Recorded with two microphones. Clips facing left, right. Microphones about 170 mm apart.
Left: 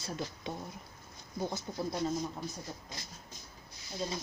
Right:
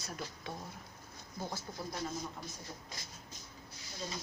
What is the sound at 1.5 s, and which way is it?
Speech, 20° left (ahead or behind).